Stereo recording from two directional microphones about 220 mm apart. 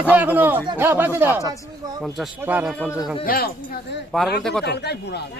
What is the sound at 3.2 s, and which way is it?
Speech, 45° left (ahead or behind).